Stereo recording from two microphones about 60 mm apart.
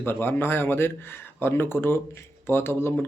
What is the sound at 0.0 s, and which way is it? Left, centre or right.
Speech, left.